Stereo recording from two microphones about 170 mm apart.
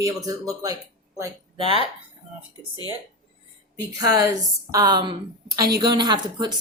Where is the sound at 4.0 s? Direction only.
20° right (ahead or behind).